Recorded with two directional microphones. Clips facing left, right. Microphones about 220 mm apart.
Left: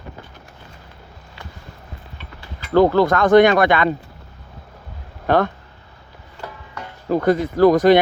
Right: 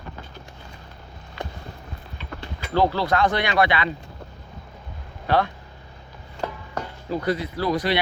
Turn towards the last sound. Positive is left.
turn(degrees=45)  # may be behind; listen again after turning